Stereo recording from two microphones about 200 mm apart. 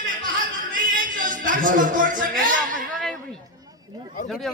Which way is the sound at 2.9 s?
Centre (ahead or behind).